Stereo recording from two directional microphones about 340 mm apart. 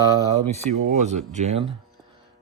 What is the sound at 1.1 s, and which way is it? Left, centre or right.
Speech, centre.